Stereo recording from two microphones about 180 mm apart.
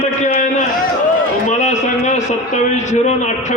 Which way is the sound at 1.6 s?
40° left (ahead or behind).